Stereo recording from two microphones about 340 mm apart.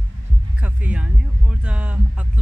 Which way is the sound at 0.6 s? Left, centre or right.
Centre.